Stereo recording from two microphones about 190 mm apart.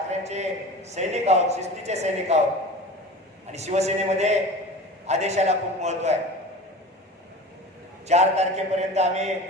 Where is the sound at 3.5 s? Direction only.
35° right (ahead or behind).